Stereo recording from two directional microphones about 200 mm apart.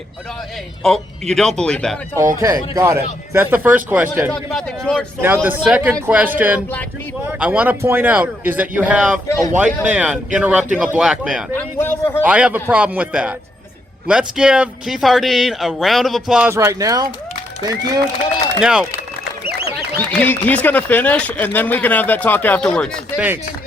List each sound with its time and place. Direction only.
0.8 s speech: centre (ahead or behind)
2.4 s speech: 15° right (ahead or behind)
4.5 s speech: 5° left (ahead or behind)
5.2 s speech: 10° right (ahead or behind)
11.5 s speech: 10° left (ahead or behind)
12.2 s speech: 5° right (ahead or behind)
18.6 s speech: 5° right (ahead or behind)
19.5 s a sound: 55° right (ahead or behind)
20.0 s speech: 10° left (ahead or behind)